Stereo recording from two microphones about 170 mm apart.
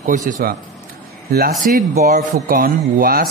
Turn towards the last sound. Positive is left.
turn(degrees=-60)  # may be behind; listen again after turning